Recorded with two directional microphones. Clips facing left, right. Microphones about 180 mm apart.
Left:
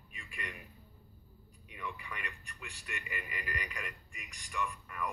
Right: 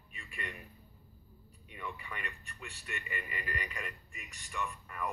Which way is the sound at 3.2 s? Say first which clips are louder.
Right 1 dB; 35° right (ahead or behind).